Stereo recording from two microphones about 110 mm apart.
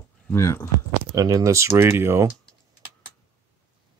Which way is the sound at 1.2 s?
30° right (ahead or behind).